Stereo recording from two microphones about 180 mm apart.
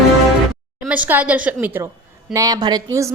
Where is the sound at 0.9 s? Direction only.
10° right (ahead or behind).